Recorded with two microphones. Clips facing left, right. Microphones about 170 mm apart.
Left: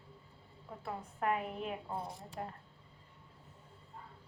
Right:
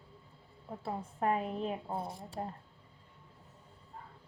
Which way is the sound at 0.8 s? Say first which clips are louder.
Right 3 dB; 30° right (ahead or behind).